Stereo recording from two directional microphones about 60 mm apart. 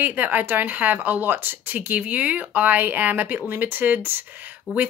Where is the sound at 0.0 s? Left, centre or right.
Right.